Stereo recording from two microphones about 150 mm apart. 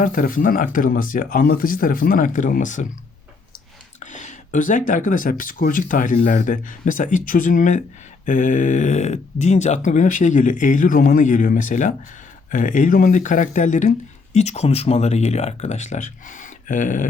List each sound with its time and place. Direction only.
0.0 s speech: 65° left (ahead or behind)
4.0 s speech: 55° left (ahead or behind)